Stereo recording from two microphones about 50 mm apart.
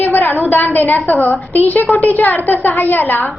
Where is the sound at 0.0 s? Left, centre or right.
Left.